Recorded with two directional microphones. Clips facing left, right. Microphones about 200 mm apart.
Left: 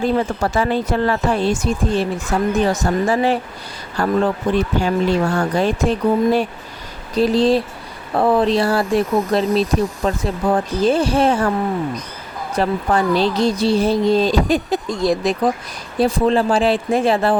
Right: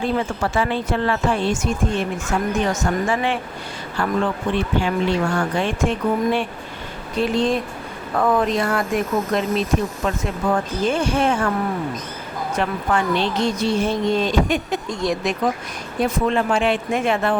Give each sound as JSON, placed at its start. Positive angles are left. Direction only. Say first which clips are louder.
{"t": 0.0, "sound": "speech", "louder": "left 4 dB", "side_deg": 40}
{"t": 12.5, "sound": "speech", "louder": "left 4 dB", "side_deg": 35}